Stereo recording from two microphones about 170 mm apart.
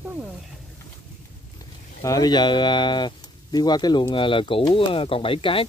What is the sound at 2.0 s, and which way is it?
Speech, 20° left (ahead or behind).